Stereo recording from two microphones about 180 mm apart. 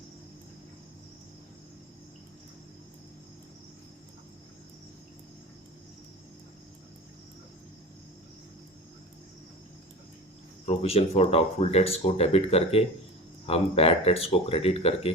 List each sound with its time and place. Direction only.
10.7 s speech: 35° left (ahead or behind)